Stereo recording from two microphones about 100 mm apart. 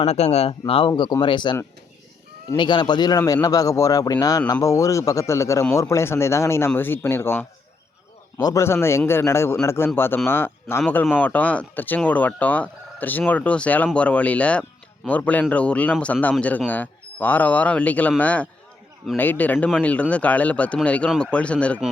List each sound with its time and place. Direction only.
0.0 s speech: 90° left
0.7 s speech: 60° left (ahead or behind)
2.6 s a man's voice: 50° left (ahead or behind); by 7.4 s 25° left (ahead or behind)
8.4 s a man's voice: 40° left (ahead or behind)
8.6 s a man's voice: 25° left (ahead or behind)